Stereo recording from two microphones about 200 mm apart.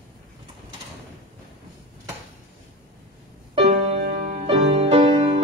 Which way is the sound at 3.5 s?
30° right (ahead or behind).